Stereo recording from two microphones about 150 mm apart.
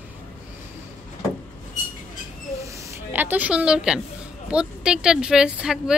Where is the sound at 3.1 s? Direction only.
10° right (ahead or behind).